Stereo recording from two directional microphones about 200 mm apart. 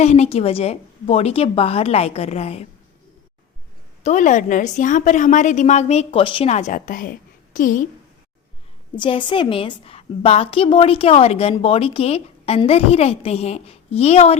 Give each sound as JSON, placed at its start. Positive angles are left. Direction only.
{"t": 0.0, "sound": "a woman's voice", "side_deg": 35}
{"t": 4.0, "sound": "a woman's voice", "side_deg": 40}
{"t": 9.0, "sound": "a woman's voice", "side_deg": 25}